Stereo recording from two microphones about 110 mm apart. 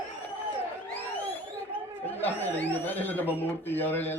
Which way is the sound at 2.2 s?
20° left (ahead or behind).